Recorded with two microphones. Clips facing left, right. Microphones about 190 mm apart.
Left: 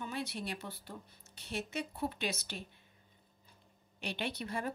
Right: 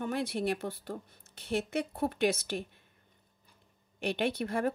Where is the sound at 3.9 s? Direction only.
55° right (ahead or behind).